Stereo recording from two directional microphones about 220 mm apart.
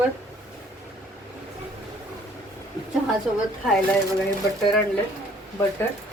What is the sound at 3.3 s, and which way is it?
Speech, 5° right (ahead or behind).